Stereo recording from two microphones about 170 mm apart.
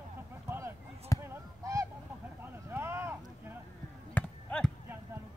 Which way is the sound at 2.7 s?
15° right (ahead or behind).